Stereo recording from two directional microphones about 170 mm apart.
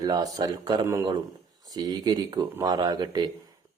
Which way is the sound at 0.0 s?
20° right (ahead or behind).